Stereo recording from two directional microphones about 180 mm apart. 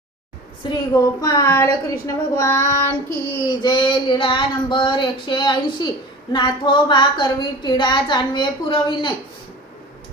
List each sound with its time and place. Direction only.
0.9 s speech: 20° left (ahead or behind)
3.4 s a woman's voice: 25° left (ahead or behind)